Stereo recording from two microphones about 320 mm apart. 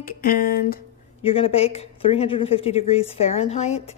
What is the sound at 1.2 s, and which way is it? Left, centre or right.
Speech, centre.